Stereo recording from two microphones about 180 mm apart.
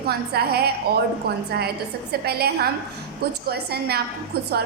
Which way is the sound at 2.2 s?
60° right (ahead or behind).